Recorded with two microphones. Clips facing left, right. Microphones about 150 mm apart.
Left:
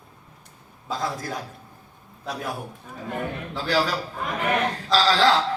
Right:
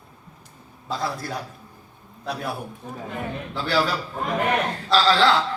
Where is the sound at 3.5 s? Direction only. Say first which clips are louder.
Right 1 dB; 40° left (ahead or behind).